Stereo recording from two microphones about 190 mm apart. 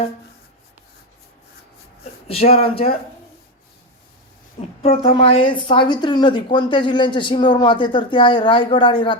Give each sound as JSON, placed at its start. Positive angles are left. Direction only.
{"t": 2.2, "sound": "speech", "side_deg": 30}
{"t": 4.8, "sound": "a woman's voice", "side_deg": 30}